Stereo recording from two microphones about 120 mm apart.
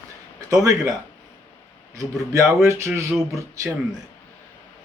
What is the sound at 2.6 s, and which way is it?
Speech, 20° right (ahead or behind).